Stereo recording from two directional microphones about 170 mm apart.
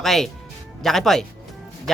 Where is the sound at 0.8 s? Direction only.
Centre (ahead or behind).